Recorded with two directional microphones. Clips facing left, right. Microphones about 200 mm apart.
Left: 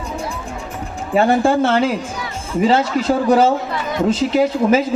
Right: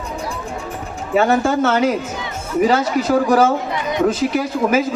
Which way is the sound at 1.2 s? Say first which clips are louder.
Left 1 dB; 30° left (ahead or behind).